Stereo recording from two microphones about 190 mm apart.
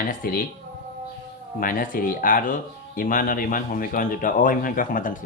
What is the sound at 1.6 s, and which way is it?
Speech, 50° left (ahead or behind).